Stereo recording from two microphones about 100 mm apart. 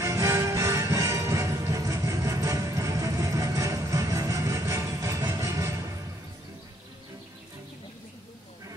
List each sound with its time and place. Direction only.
0.0 s music: 30° right (ahead or behind)